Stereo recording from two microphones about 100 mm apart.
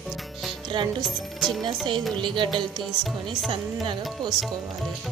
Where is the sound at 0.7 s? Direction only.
50° right (ahead or behind).